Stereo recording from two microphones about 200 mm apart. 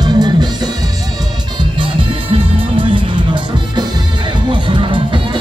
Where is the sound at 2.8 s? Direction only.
25° right (ahead or behind).